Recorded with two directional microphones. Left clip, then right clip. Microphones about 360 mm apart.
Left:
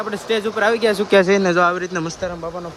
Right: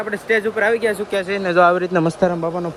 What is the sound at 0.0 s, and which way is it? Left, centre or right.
Speech, centre.